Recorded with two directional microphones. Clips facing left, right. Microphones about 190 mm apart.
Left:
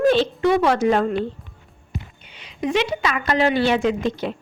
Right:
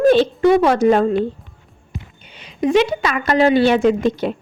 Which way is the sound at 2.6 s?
45° right (ahead or behind).